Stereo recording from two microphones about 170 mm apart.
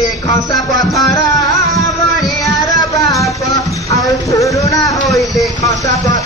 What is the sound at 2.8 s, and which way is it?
Music, 20° left (ahead or behind).